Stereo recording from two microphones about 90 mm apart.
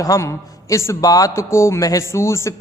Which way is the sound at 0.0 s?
40° left (ahead or behind).